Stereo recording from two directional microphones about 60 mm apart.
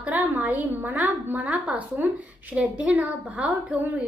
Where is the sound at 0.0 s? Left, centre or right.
Right.